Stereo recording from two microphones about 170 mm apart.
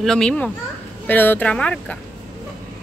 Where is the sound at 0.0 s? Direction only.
5° left (ahead or behind).